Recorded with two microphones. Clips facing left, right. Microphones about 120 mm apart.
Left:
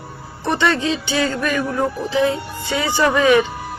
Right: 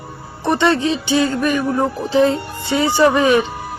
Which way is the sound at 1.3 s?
15° right (ahead or behind).